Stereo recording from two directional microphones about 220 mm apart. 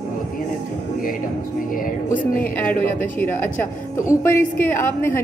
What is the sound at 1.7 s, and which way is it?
Speech, 40° left (ahead or behind).